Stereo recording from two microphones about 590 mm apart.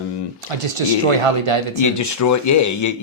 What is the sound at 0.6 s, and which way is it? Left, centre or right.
Speech, right.